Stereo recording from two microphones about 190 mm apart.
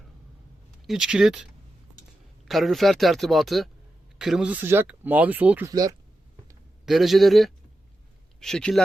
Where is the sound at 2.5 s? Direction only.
Centre (ahead or behind).